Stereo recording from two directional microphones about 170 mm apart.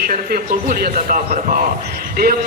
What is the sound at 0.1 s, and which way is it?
A man's voice, 55° right (ahead or behind).